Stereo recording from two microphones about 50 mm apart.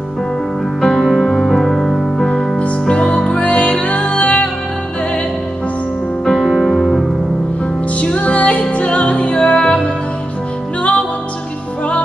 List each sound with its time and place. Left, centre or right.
0.7 s music: centre
2.2 s music: left
6.2 s music: centre
8.0 s music: left